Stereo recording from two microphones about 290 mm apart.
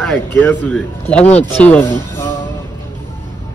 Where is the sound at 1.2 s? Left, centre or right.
Left.